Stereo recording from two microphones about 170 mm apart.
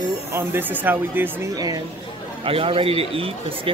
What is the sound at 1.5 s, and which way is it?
Speech, 20° right (ahead or behind).